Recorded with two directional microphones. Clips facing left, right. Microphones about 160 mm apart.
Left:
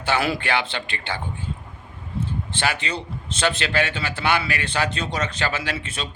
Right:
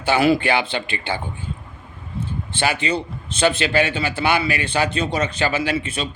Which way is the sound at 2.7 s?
5° right (ahead or behind).